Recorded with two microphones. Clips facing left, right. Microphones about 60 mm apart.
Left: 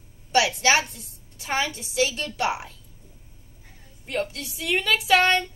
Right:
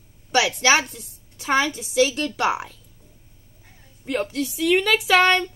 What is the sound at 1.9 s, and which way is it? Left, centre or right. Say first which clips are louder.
Speech: right 5 dB; right.